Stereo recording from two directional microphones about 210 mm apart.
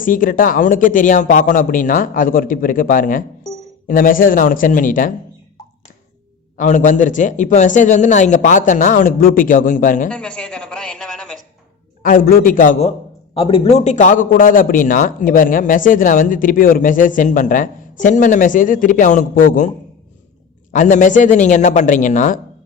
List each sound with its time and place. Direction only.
0.0 s a man's voice: 40° left (ahead or behind)
6.6 s a man's voice: 35° left (ahead or behind)
10.1 s a sound: 5° left (ahead or behind)
12.0 s a man's voice: 40° left (ahead or behind)
13.3 s a man's voice: 25° left (ahead or behind)
20.7 s a man's voice: 35° left (ahead or behind)